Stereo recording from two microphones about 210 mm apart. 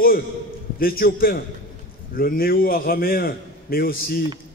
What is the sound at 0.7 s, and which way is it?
A man's voice, 45° left (ahead or behind).